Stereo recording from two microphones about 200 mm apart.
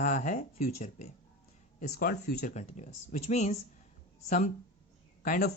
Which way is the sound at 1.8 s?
45° left (ahead or behind).